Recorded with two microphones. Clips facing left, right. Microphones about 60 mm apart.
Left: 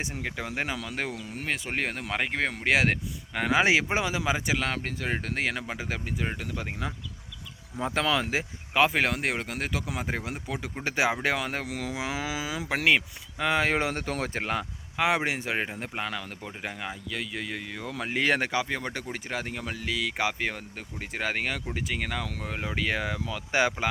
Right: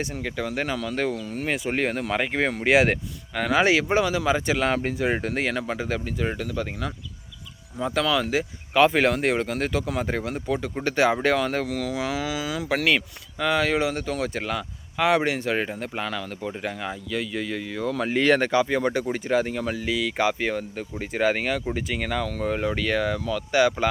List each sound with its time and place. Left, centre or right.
0.0 s speech: centre
1.4 s speech: centre
3.3 s speech: centre
4.5 s speech: centre
5.4 s speech: centre
7.9 s speech: left
8.8 s speech: centre; by 13.7 s left
13.7 s speech: left
14.9 s speech: centre
23.5 s speech: left